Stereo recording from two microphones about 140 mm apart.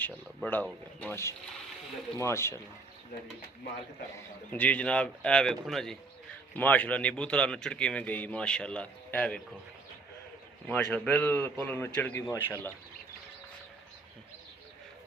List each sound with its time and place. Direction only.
0.4 s speech: 10° left (ahead or behind)
4.5 s speech: 10° left (ahead or behind)
10.7 s speech: 10° left (ahead or behind)